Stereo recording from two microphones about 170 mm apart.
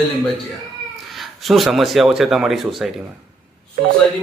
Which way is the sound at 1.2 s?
Centre (ahead or behind).